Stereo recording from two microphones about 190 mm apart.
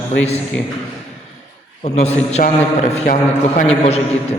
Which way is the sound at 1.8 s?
35° left (ahead or behind).